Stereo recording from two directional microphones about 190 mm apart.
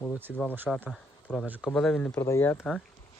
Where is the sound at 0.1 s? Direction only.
10° right (ahead or behind).